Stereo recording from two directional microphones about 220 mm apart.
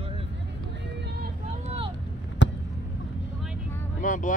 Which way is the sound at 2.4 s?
55° left (ahead or behind).